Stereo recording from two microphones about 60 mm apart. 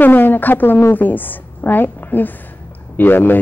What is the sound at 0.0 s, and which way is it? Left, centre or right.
A woman's voice, left.